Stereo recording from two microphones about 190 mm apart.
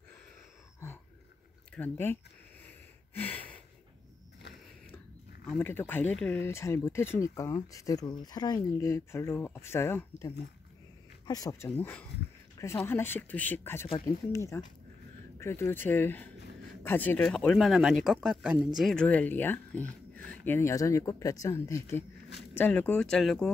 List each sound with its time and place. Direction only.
1.7 s speech: 10° left (ahead or behind)
3.2 s a sound: 10° left (ahead or behind)
5.5 s speech: 10° left (ahead or behind)
11.2 s speech: 20° left (ahead or behind)
11.7 s speech: 10° left (ahead or behind)